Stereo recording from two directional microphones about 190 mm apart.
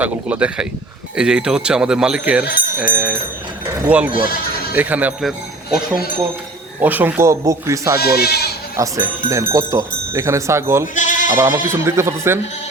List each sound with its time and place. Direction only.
0.0 s speech: 5° right (ahead or behind)
6.8 s speech: 10° right (ahead or behind)
7.9 s speech: 55° left (ahead or behind)
8.7 s speech: 15° right (ahead or behind)
10.9 s bleat: 40° left (ahead or behind)
11.3 s speech: 15° right (ahead or behind)